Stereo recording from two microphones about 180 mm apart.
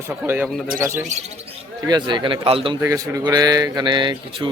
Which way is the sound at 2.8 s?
15° right (ahead or behind).